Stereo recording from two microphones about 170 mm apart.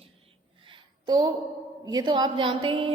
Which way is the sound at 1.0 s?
25° right (ahead or behind).